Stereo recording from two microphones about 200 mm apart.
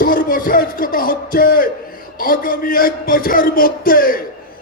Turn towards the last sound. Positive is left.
turn(degrees=45)  # may be behind; listen again after turning